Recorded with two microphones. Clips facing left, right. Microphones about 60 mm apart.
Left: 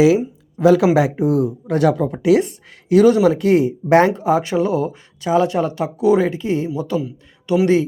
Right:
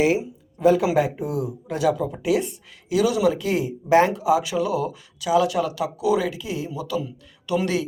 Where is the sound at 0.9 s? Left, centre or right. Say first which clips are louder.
Left 6 dB; left.